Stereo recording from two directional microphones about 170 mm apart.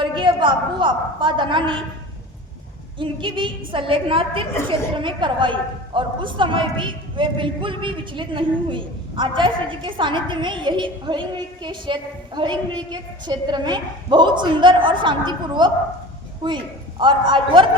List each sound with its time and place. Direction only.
0.0 s a woman's voice: 30° right (ahead or behind)
3.0 s a woman's voice: 30° right (ahead or behind)